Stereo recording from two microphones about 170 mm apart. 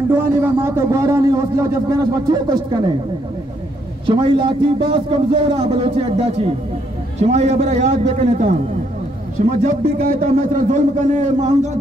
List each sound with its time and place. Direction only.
0.1 s a man's voice: 15° right (ahead or behind)
4.0 s a man's voice: 30° right (ahead or behind)
9.6 s a man's voice: 55° right (ahead or behind)